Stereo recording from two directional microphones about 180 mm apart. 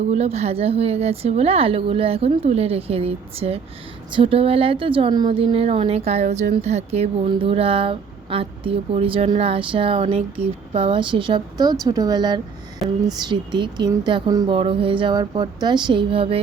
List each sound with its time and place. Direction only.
0.1 s a woman's voice: 35° right (ahead or behind)